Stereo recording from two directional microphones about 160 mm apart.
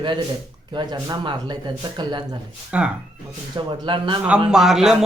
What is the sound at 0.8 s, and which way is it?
Speech, 25° right (ahead or behind).